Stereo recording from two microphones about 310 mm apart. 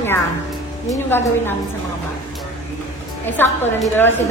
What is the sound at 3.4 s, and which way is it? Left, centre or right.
Speech, centre.